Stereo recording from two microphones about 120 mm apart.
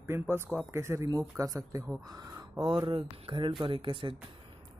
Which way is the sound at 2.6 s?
45° right (ahead or behind).